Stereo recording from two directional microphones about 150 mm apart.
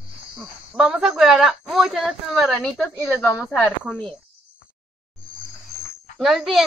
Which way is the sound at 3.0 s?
20° left (ahead or behind).